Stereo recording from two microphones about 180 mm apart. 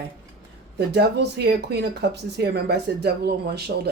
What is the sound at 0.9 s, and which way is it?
Speech, 70° right (ahead or behind).